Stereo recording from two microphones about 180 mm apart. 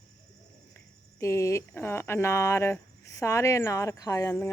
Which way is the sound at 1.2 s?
15° left (ahead or behind).